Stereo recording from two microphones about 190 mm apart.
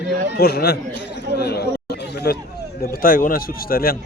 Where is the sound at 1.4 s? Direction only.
60° left (ahead or behind).